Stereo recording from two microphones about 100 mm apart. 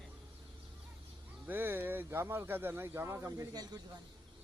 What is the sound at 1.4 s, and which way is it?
Speech, 20° right (ahead or behind).